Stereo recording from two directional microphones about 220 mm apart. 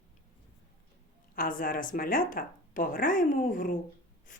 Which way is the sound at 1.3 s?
40° left (ahead or behind).